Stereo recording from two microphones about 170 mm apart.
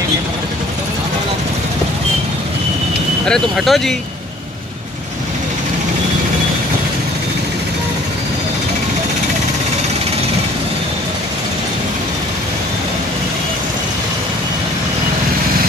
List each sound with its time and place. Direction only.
3.3 s speech: centre (ahead or behind)